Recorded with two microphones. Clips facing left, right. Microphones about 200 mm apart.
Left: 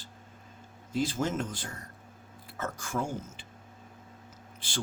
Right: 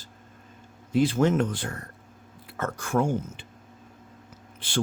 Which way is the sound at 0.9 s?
60° right (ahead or behind).